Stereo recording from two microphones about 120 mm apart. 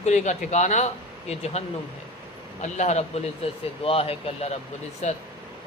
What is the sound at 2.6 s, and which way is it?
Speech, 75° left (ahead or behind).